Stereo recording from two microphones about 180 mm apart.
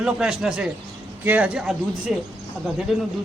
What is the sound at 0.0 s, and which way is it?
Speech, 5° right (ahead or behind).